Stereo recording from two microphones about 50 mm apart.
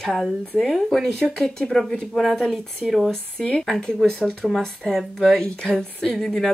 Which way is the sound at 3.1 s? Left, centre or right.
Centre.